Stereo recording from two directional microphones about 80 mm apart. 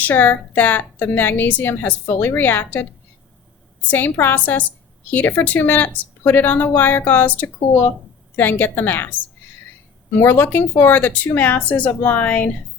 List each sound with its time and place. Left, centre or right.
0.0 s a woman's voice: left
3.8 s a woman's voice: left
10.2 s a woman's voice: left